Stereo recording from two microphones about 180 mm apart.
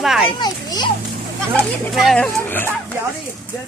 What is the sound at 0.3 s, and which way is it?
Speech, 25° left (ahead or behind).